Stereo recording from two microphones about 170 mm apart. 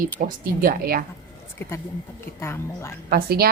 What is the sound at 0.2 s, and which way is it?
Speech, 55° right (ahead or behind).